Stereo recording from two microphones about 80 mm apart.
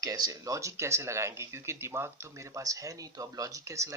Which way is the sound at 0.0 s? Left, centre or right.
Right.